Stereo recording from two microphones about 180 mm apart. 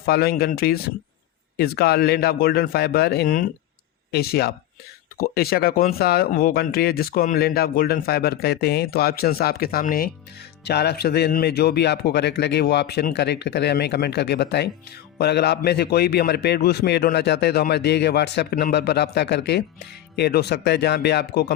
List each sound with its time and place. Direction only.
0.0 s speech: 60° left (ahead or behind)
10.6 s speech: 65° left (ahead or behind)